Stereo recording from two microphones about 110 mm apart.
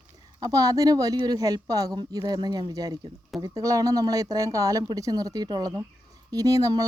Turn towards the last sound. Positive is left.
turn(degrees=-30)  # may be behind; listen again after turning